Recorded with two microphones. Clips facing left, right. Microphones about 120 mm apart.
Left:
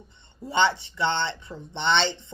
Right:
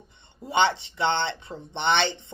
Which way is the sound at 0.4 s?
20° right (ahead or behind).